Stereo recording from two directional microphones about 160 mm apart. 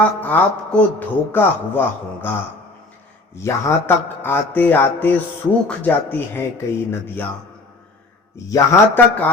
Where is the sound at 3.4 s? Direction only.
20° left (ahead or behind).